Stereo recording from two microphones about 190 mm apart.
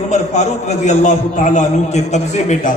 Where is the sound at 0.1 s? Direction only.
35° left (ahead or behind).